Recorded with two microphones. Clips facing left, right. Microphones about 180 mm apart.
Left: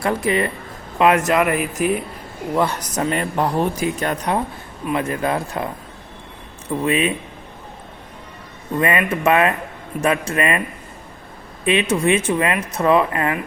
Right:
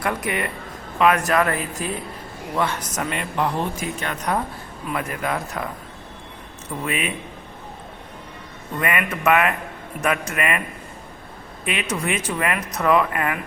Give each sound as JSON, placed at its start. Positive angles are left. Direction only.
{"t": 0.0, "sound": "speech", "side_deg": 30}
{"t": 2.6, "sound": "speech", "side_deg": 30}
{"t": 4.9, "sound": "speech", "side_deg": 25}
{"t": 6.8, "sound": "speech", "side_deg": 30}
{"t": 8.8, "sound": "speech", "side_deg": 30}
{"t": 11.6, "sound": "speech", "side_deg": 25}